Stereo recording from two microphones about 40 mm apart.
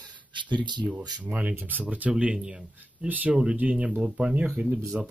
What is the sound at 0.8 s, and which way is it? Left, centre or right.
Speech, right.